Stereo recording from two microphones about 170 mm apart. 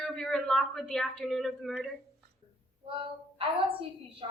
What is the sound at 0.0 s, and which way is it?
Speech, 5° left (ahead or behind).